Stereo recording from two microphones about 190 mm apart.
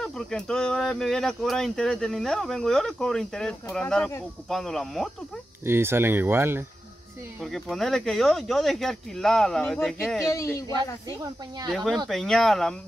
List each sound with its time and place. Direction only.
0.0 s speech: 5° left (ahead or behind)
5.7 s speech: 10° right (ahead or behind)
7.4 s speech: centre (ahead or behind)
10.2 s speech: 15° left (ahead or behind)
11.7 s speech: centre (ahead or behind)